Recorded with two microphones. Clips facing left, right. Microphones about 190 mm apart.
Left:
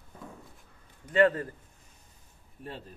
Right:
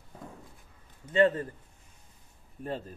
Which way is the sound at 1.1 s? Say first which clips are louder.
Even; 25° right (ahead or behind).